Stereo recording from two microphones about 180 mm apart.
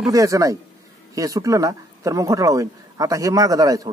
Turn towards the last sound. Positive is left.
turn(degrees=-20)  # may be behind; listen again after turning